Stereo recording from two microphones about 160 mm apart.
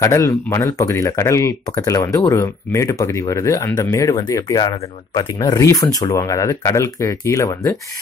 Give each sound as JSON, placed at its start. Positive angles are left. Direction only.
{"t": 0.0, "sound": "speech", "side_deg": 20}